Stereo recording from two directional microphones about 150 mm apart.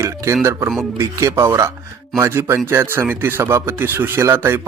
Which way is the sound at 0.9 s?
20° right (ahead or behind).